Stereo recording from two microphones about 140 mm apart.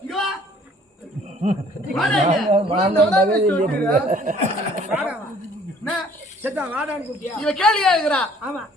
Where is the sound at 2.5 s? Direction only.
45° right (ahead or behind).